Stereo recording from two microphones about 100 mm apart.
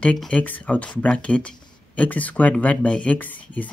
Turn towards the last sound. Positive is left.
turn(degrees=15)  # may be behind; listen again after turning